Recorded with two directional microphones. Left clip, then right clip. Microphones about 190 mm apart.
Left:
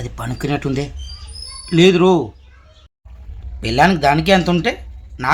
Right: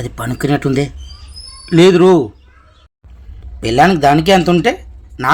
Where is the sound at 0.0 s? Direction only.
25° right (ahead or behind).